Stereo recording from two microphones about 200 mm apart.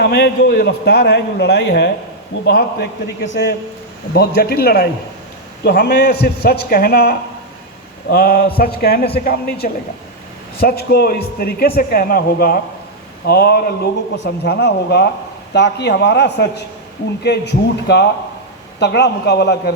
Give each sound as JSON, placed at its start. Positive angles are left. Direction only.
{"t": 0.0, "sound": "a man's voice", "side_deg": 55}